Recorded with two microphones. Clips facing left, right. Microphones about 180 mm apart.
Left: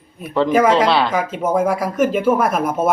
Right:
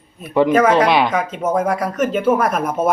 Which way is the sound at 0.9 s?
15° right (ahead or behind).